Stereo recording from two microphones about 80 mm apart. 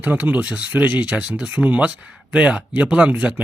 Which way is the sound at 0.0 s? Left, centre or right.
Centre.